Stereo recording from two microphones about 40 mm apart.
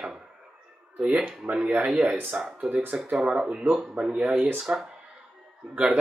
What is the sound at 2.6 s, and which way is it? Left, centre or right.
Speech, centre.